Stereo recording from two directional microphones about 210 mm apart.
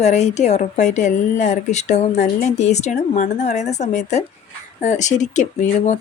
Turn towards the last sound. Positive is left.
turn(degrees=35)  # may be behind; listen again after turning